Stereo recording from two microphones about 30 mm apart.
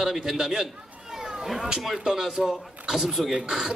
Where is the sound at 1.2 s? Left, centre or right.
Right.